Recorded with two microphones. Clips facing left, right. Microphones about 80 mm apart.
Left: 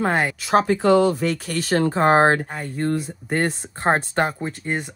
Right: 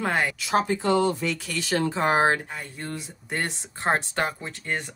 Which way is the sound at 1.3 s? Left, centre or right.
Left.